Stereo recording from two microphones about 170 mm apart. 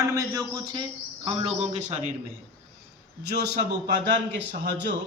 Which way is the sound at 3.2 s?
70° right (ahead or behind).